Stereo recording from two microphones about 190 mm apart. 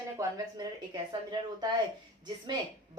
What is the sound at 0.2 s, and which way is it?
Speech, 20° right (ahead or behind).